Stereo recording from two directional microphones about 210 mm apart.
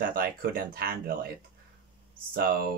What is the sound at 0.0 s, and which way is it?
Speech, 45° right (ahead or behind).